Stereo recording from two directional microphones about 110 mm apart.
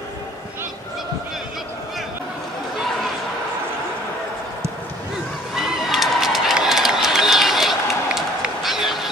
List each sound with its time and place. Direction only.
5.5 s run: 5° right (ahead or behind)